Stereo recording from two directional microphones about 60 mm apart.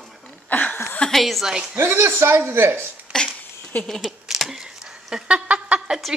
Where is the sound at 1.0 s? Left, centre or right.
Centre.